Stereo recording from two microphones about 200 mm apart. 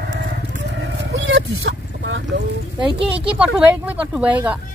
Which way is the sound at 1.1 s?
65° right (ahead or behind).